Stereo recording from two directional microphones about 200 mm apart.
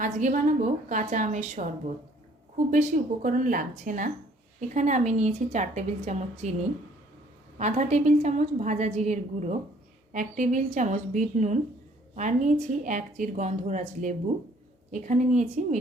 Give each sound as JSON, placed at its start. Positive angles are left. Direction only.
{"t": 0.0, "sound": "a woman's voice", "side_deg": -40}
{"t": 2.6, "sound": "a woman's voice", "side_deg": -40}
{"t": 7.6, "sound": "a woman's voice", "side_deg": -35}